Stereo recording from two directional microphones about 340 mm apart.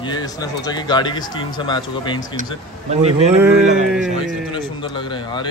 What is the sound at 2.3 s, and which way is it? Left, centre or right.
Speech, right.